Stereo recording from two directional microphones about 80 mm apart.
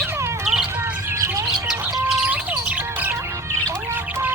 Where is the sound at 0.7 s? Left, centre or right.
Right.